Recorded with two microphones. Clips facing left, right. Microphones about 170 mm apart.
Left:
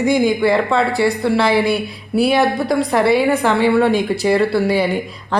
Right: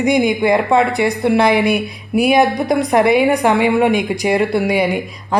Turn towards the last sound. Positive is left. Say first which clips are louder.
# right 1 dB
turn(degrees=-15)  # may be behind; listen again after turning